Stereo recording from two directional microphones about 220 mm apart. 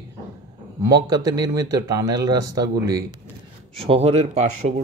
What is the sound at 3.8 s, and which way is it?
Speech, 25° right (ahead or behind).